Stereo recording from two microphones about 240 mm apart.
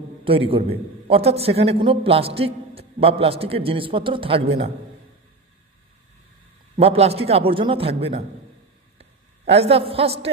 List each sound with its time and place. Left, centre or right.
0.2 s a man's voice: right
6.8 s a man's voice: right
8.9 s a sound: right